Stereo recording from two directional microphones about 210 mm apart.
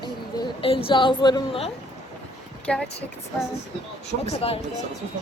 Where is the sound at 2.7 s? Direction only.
5° left (ahead or behind).